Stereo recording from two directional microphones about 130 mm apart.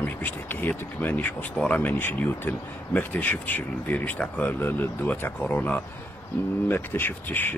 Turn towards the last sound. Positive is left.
turn(degrees=15)  # may be behind; listen again after turning